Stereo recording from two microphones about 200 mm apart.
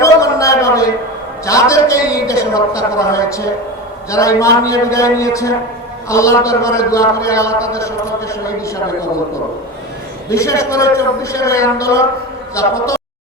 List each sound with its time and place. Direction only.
0.0 s a sound: 15° left (ahead or behind)
1.5 s a man's voice: 15° left (ahead or behind)
10.2 s a man's voice: 15° left (ahead or behind)